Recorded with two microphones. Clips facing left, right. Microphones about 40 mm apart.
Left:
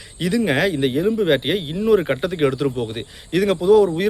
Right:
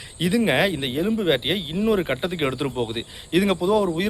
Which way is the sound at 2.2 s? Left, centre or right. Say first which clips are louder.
Left 5 dB; centre.